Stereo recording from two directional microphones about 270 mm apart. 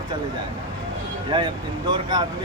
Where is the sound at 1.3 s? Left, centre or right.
Centre.